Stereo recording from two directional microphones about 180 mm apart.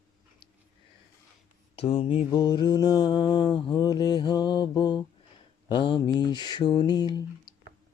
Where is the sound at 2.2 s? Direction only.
20° left (ahead or behind).